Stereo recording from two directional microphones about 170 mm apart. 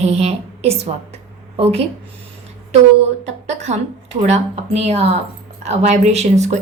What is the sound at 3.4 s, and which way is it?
A woman's voice, 40° right (ahead or behind).